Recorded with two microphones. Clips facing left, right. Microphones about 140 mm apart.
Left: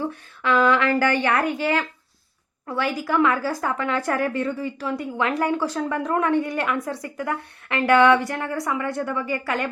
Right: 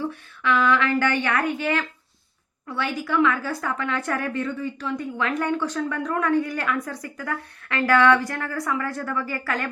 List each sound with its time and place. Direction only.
0.0 s a woman's voice: 40° left (ahead or behind)
3.0 s a woman's voice: 35° left (ahead or behind)